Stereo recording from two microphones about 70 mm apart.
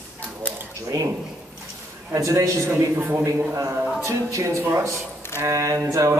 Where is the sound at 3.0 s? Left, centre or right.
Right.